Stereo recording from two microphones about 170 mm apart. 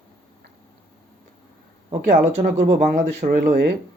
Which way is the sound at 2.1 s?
80° right.